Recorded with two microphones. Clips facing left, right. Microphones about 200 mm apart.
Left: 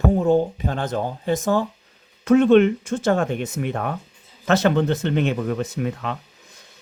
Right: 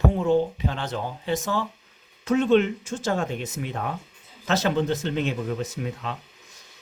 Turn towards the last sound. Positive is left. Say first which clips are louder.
# left 5 dB
turn(degrees=60)  # may be behind; listen again after turning